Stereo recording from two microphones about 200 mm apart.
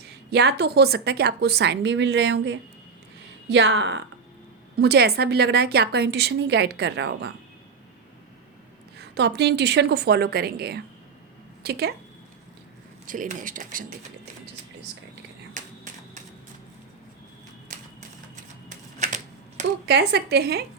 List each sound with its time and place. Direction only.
0.0 s a woman's voice: 55° right (ahead or behind)
9.0 s a woman's voice: 60° right (ahead or behind)
13.1 s speech: 40° right (ahead or behind)
15.5 s a sound: 40° right (ahead or behind)
17.7 s typewriter: 45° right (ahead or behind)
18.7 s typing: 35° right (ahead or behind)
19.8 s a woman's voice: 55° right (ahead or behind)